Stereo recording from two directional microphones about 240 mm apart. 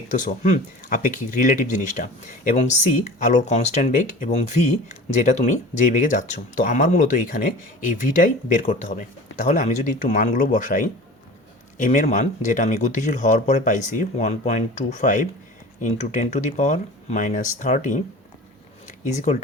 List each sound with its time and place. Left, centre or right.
0.2 s speech: left